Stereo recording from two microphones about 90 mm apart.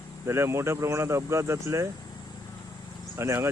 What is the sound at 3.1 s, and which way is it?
Speech, 30° right (ahead or behind).